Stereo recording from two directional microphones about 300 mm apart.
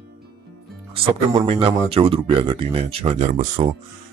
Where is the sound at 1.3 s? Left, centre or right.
Centre.